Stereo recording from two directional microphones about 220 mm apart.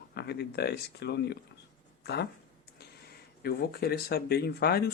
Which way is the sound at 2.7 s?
45° left (ahead or behind).